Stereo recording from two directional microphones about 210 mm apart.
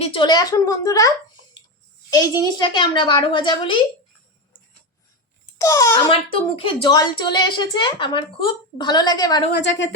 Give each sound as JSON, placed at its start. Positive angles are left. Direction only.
{"t": 0.0, "sound": "a woman's voice", "side_deg": 25}
{"t": 5.5, "sound": "a child's voice", "side_deg": 15}
{"t": 9.5, "sound": "a woman's voice", "side_deg": 60}